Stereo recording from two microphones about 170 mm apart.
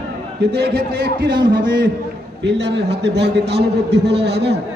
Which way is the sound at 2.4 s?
85° right.